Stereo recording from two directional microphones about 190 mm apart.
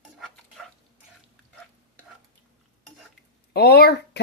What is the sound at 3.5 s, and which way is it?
Speech, 55° left (ahead or behind).